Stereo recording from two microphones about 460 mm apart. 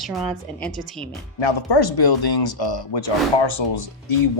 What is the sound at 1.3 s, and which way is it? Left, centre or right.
Speech, left.